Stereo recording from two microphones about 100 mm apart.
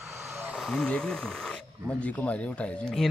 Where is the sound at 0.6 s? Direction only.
5° left (ahead or behind).